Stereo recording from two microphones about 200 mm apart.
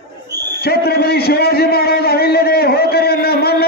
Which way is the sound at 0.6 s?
50° left (ahead or behind).